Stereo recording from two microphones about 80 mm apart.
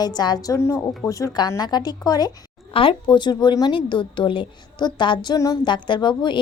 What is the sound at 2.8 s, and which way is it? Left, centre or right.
A woman's voice, left.